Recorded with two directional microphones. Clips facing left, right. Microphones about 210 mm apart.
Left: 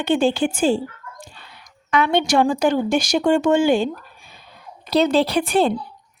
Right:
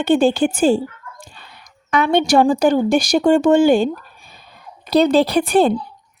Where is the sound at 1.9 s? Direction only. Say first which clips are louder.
Right 3 dB; 40° right (ahead or behind).